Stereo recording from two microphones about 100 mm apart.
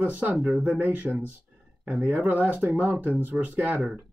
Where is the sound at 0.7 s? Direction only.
15° right (ahead or behind).